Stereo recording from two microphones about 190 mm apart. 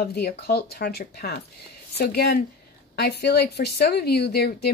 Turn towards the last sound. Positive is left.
turn(degrees=55)  # may be behind; listen again after turning